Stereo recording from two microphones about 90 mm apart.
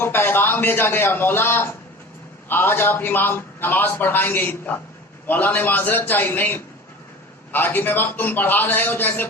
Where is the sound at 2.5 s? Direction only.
25° left (ahead or behind).